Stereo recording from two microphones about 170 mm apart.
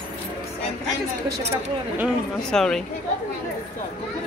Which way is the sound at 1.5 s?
10° right (ahead or behind).